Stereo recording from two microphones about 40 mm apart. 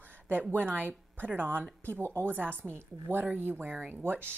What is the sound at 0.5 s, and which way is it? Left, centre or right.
A woman's voice, right.